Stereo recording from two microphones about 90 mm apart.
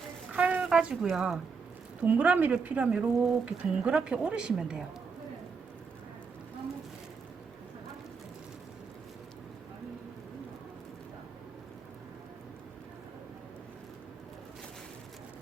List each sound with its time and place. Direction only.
0.3 s a sound: 15° right (ahead or behind)
1.1 s speech: 5° right (ahead or behind)
2.0 s speech: 15° right (ahead or behind)